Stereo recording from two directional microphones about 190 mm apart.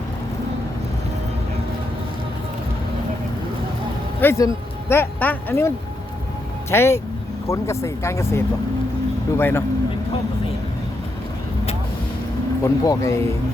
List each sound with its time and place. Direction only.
4.2 s speech: 15° left (ahead or behind)
12.6 s speech: 20° left (ahead or behind)